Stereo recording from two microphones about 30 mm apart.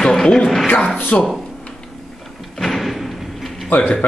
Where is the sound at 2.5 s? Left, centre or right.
Centre.